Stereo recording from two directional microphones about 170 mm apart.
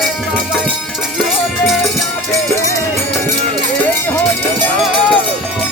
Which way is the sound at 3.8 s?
10° left (ahead or behind).